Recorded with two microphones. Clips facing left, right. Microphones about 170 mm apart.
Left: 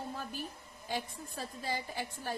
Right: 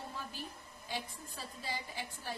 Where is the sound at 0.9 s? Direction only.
45° left (ahead or behind).